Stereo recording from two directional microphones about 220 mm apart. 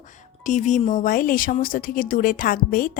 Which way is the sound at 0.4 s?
35° left (ahead or behind).